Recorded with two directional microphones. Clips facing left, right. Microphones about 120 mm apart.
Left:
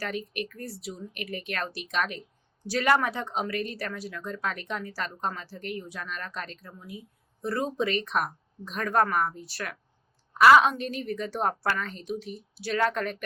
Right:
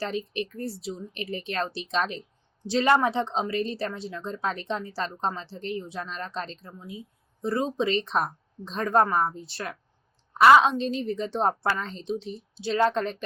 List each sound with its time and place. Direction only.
0.0 s a woman's voice: 25° right (ahead or behind)